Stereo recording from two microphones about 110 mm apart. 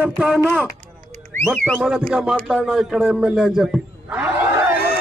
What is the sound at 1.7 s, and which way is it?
Speech, 10° right (ahead or behind).